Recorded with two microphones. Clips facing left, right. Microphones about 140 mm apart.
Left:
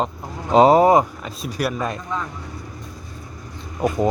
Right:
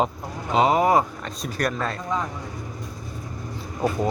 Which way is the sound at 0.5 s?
35° left (ahead or behind).